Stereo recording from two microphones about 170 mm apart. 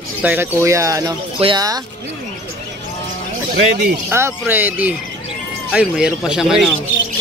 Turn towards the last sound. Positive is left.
turn(degrees=-5)  # may be behind; listen again after turning